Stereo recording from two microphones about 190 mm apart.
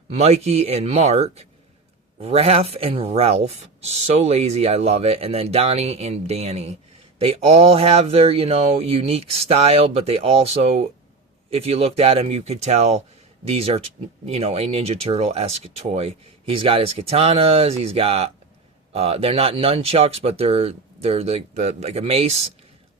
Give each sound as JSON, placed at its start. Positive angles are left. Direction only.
{"t": 0.2, "sound": "speech", "side_deg": -35}